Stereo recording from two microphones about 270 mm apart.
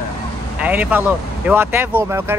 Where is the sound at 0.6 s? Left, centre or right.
Centre.